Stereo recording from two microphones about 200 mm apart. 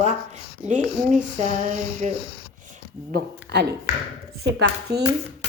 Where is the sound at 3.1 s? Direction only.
55° right (ahead or behind).